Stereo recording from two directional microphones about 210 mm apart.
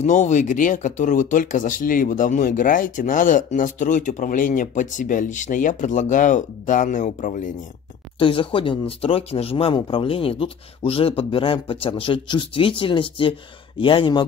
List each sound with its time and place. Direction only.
0.0 s speech: 35° left (ahead or behind)
8.2 s speech: 25° left (ahead or behind)